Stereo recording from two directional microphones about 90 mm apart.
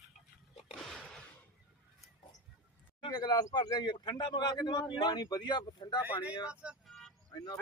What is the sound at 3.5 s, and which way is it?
A man's voice, 50° left (ahead or behind).